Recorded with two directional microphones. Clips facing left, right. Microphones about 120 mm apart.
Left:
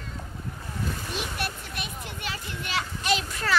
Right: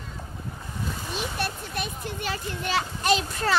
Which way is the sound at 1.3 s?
35° right (ahead or behind).